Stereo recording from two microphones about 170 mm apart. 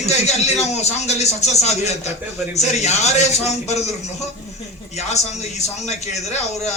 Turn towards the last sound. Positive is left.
turn(degrees=40)  # may be behind; listen again after turning